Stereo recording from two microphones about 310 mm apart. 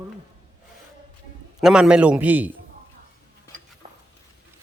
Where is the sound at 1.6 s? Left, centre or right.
Centre.